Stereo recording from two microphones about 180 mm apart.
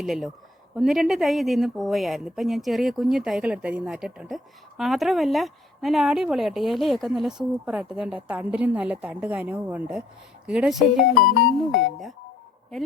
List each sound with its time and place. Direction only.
0.0 s speech: centre (ahead or behind)
11.1 s speech: 60° left (ahead or behind)